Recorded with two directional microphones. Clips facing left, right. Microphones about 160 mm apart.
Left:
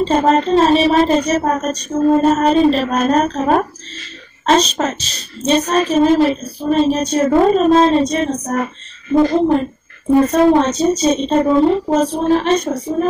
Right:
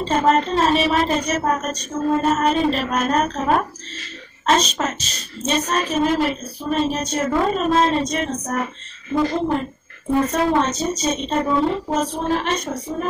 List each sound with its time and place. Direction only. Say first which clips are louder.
0.0 s a woman's voice: left 4 dB; 30° left (ahead or behind)